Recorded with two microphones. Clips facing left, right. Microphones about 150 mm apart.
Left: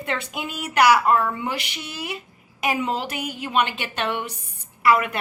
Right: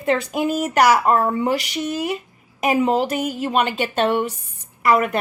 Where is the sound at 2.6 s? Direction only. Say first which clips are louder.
Right 7 dB; 40° right (ahead or behind).